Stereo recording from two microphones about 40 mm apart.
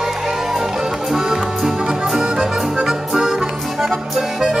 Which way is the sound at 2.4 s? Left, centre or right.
Centre.